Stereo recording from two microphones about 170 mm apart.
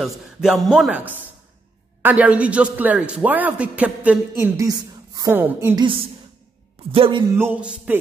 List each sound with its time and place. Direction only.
0.0 s a man's voice: centre (ahead or behind)
6.9 s a man's voice: 30° right (ahead or behind)
7.3 s a man's voice: 10° right (ahead or behind)